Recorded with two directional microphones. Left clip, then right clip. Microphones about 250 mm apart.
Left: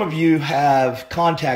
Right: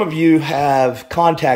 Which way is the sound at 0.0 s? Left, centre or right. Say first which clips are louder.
Right 4 dB; centre.